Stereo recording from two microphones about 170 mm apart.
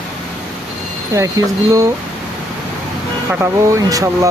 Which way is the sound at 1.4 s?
20° right (ahead or behind).